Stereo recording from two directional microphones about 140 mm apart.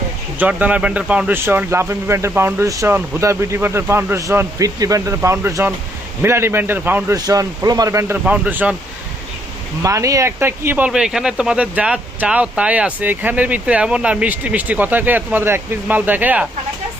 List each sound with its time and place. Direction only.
0.3 s speech: 10° right (ahead or behind)
7.3 s speech: 25° right (ahead or behind); by 8.7 s 10° right (ahead or behind)
9.8 s speech: 20° right (ahead or behind)